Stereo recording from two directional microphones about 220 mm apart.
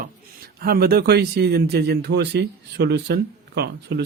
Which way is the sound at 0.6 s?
45° right (ahead or behind).